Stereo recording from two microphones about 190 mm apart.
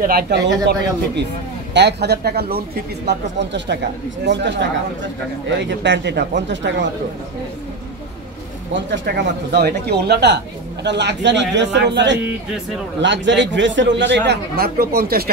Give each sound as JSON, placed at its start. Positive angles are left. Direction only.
{"t": 0.0, "sound": "speech", "side_deg": -50}
{"t": 5.7, "sound": "a man's voice", "side_deg": -65}
{"t": 8.7, "sound": "a man's voice", "side_deg": -65}